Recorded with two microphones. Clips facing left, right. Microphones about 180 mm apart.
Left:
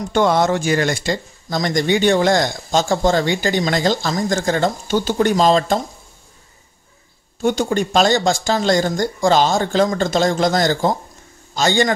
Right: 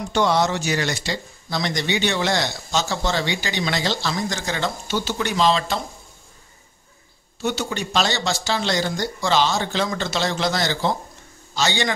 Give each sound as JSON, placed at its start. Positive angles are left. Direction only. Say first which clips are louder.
{"t": 0.1, "sound": "speech", "louder": "left 4 dB", "side_deg": 50}
{"t": 7.4, "sound": "speech", "louder": "left 7 dB", "side_deg": 45}